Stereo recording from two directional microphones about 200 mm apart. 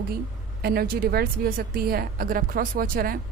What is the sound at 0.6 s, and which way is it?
A woman's voice, 50° right (ahead or behind).